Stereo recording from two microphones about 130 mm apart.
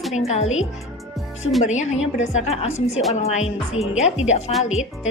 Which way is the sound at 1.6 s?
65° left (ahead or behind).